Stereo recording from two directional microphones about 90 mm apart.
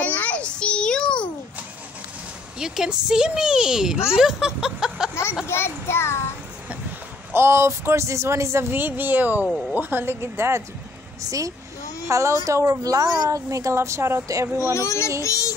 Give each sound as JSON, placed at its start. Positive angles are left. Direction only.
{"t": 0.0, "sound": "a sound", "side_deg": 15}
{"t": 2.6, "sound": "speech", "side_deg": -5}
{"t": 4.1, "sound": "a sound", "side_deg": -5}
{"t": 5.5, "sound": "a child's voice", "side_deg": 25}
{"t": 7.3, "sound": "speech", "side_deg": -30}
{"t": 11.2, "sound": "speech", "side_deg": -40}
{"t": 14.6, "sound": "a child's voice", "side_deg": 35}